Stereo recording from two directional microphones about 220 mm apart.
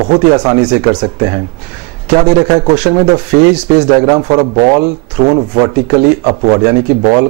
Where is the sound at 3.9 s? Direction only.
20° right (ahead or behind).